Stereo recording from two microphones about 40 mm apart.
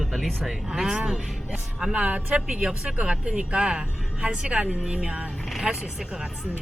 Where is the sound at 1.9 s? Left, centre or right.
Right.